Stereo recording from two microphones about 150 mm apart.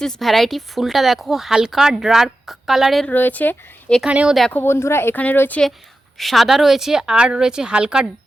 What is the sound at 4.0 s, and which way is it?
Speech, 5° right (ahead or behind).